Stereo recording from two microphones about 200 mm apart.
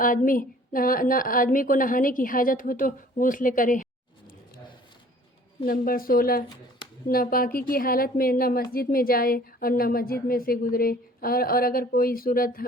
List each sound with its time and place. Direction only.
0.0 s a woman's voice: 45° left (ahead or behind)
5.6 s a woman's voice: 45° left (ahead or behind)